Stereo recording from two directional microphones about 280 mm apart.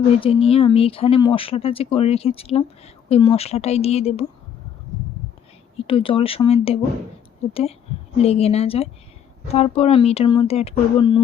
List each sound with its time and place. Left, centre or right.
0.2 s speech: centre
5.9 s speech: centre